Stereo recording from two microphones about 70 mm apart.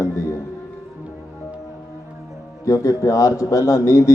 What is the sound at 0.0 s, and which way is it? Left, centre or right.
Music, left.